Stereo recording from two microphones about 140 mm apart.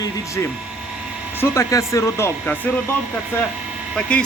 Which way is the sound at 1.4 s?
20° left (ahead or behind).